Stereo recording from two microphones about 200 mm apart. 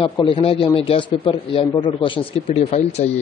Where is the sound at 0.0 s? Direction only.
25° left (ahead or behind).